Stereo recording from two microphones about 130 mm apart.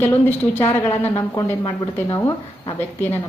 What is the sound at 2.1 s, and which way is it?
Speech, 20° left (ahead or behind).